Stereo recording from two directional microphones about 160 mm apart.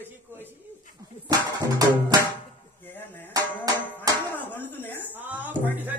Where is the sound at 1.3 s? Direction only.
25° right (ahead or behind).